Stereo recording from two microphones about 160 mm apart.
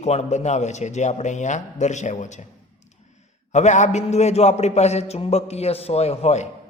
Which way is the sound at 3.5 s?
45° left (ahead or behind).